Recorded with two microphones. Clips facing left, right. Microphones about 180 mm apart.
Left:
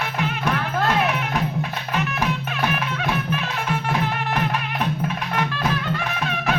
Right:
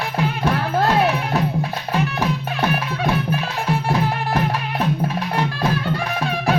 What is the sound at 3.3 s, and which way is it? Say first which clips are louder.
Music: right 3 dB; 35° right (ahead or behind).